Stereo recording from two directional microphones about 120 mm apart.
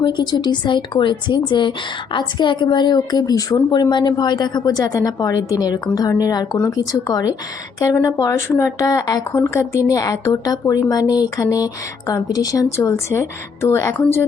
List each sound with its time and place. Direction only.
0.0 s a woman's voice: 40° left (ahead or behind); by 13.9 s 25° left (ahead or behind)